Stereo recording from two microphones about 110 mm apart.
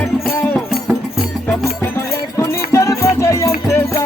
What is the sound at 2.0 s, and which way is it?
Music, 25° left (ahead or behind).